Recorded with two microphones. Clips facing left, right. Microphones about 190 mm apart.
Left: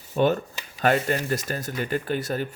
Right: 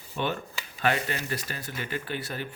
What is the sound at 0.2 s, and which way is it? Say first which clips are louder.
Speech: left 9 dB; 40° left (ahead or behind).